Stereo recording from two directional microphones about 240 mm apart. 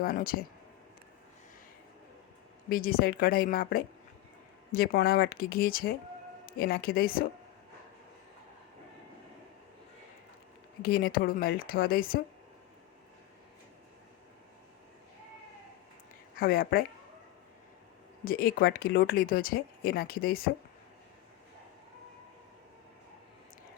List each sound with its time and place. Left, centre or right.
0.0 s speech: left
2.6 s speech: left
10.8 s speech: left
16.4 s speech: left
18.3 s speech: left